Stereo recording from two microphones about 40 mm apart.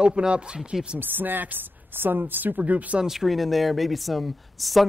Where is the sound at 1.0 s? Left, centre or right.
Right.